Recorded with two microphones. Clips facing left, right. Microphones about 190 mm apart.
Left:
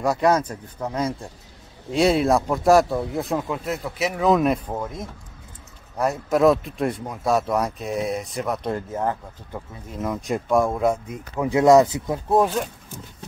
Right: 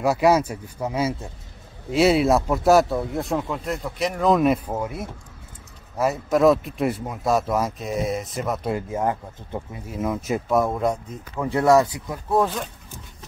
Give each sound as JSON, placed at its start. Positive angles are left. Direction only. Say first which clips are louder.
{"t": 0.0, "sound": "speech", "louder": "right 1 dB", "side_deg": -5}
{"t": 11.1, "sound": "speech", "louder": "left 2 dB", "side_deg": 10}